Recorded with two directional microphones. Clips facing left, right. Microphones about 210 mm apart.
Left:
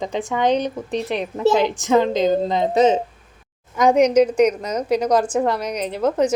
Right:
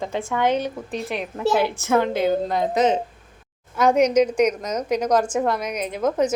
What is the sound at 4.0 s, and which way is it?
Speech, 10° left (ahead or behind).